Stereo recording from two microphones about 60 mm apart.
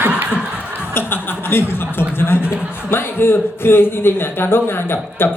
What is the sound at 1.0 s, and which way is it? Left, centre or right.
A man's voice, left.